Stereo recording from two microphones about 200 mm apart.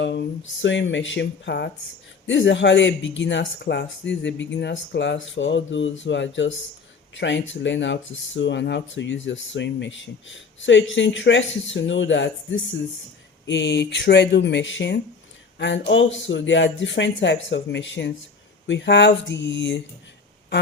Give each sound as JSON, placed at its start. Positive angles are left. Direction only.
{"t": 0.6, "sound": "speech", "side_deg": 65}